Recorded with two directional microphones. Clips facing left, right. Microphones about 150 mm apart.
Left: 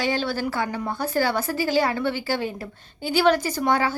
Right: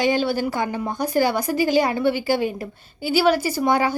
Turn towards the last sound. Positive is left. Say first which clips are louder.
# right 3 dB
turn(degrees=-15)  # may be behind; listen again after turning